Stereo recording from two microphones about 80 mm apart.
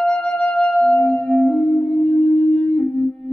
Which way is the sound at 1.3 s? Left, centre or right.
Centre.